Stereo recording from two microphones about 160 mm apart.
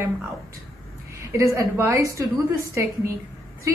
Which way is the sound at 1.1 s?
15° right (ahead or behind).